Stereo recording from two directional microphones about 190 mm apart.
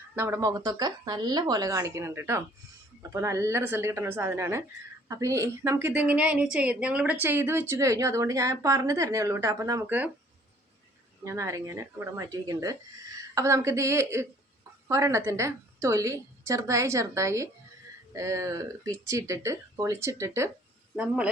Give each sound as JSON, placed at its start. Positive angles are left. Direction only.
{"t": 0.2, "sound": "a woman's voice", "side_deg": -15}
{"t": 11.2, "sound": "a woman's voice", "side_deg": -15}